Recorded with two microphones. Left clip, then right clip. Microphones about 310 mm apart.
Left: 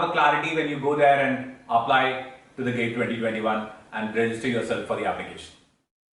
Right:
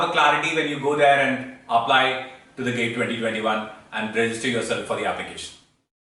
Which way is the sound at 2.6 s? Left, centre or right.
Centre.